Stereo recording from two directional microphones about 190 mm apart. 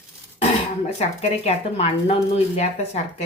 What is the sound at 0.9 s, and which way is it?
Speech, 35° left (ahead or behind).